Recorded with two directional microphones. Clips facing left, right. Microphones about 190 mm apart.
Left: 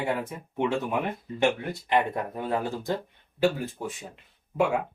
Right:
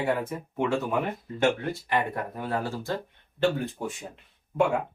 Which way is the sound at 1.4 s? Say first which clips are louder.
Right 1 dB; 20° left (ahead or behind).